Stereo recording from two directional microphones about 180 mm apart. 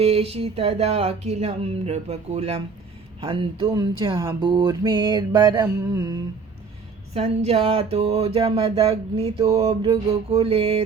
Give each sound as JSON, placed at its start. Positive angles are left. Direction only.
{"t": 0.0, "sound": "music", "side_deg": -35}
{"t": 3.2, "sound": "mantra", "side_deg": -25}
{"t": 7.1, "sound": "music", "side_deg": -35}